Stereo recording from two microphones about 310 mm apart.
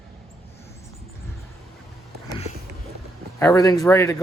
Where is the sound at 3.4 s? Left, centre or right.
Centre.